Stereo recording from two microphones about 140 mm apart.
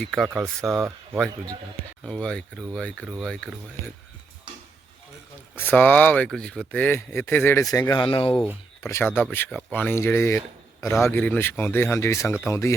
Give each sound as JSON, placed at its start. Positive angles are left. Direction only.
{"t": 0.0, "sound": "speech", "side_deg": 0}
{"t": 2.0, "sound": "speech", "side_deg": 5}
{"t": 5.5, "sound": "speech", "side_deg": 10}
{"t": 8.8, "sound": "speech", "side_deg": 20}
{"t": 9.5, "sound": "speech", "side_deg": -5}
{"t": 9.7, "sound": "speech", "side_deg": 15}